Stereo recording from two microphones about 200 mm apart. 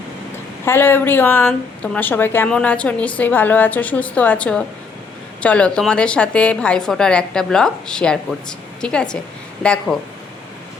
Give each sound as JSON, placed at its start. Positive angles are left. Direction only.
{"t": 0.6, "sound": "a woman's voice", "side_deg": 10}